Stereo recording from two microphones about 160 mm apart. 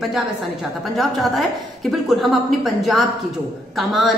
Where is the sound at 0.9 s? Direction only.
Centre (ahead or behind).